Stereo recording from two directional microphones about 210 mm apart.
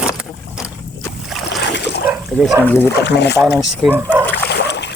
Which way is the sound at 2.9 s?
55° left (ahead or behind).